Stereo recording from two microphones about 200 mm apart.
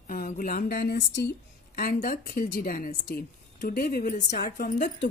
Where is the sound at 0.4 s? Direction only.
45° left (ahead or behind).